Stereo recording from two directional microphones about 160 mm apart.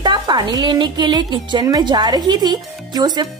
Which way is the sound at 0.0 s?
25° right (ahead or behind).